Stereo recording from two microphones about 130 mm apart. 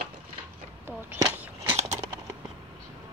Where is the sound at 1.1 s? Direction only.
15° right (ahead or behind).